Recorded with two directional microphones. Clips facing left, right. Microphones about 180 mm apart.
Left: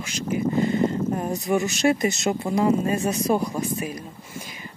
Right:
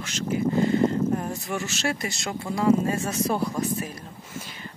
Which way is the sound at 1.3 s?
20° left (ahead or behind).